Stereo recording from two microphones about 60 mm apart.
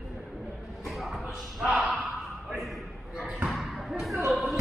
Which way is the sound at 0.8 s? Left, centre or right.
Centre.